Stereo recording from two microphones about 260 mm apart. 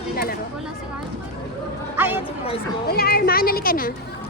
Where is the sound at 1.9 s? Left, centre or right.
Centre.